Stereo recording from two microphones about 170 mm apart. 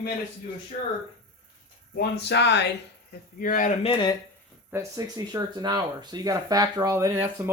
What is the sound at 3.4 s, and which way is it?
Speech, 55° left (ahead or behind).